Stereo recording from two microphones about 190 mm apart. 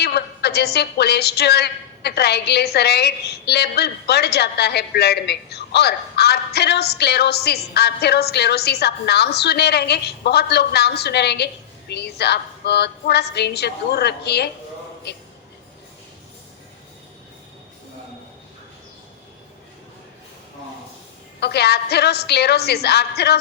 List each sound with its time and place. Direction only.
0.0 s a woman's voice: 60° left (ahead or behind)
21.4 s a woman's voice: 60° left (ahead or behind)